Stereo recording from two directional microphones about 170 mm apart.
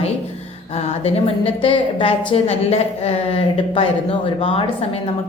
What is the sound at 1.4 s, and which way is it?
A woman's voice, 35° left (ahead or behind).